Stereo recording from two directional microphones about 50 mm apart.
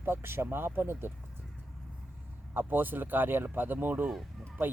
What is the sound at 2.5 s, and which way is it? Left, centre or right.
Speech, right.